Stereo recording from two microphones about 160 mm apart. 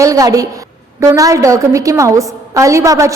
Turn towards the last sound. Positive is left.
turn(degrees=-20)  # may be behind; listen again after turning